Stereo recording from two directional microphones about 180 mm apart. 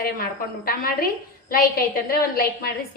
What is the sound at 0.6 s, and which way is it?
A woman's voice, 55° left (ahead or behind).